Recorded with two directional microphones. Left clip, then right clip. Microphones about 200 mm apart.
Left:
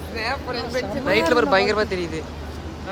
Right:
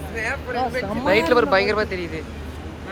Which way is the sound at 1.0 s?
10° left (ahead or behind).